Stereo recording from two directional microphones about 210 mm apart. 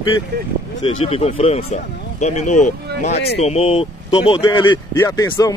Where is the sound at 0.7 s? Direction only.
25° left (ahead or behind).